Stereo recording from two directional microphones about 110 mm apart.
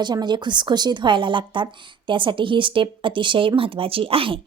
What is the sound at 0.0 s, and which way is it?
A woman's voice, 40° right (ahead or behind).